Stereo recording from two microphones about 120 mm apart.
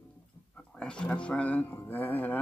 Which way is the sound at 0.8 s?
10° left (ahead or behind).